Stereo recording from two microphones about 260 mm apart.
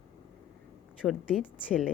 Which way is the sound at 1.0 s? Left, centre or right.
Centre.